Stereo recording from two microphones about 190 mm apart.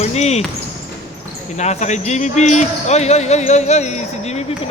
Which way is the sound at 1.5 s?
35° left (ahead or behind).